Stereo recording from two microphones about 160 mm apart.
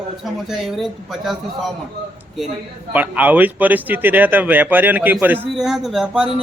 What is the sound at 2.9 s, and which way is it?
A man's voice, 10° right (ahead or behind).